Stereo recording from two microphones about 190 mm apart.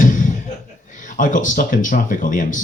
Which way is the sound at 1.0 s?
45° left (ahead or behind).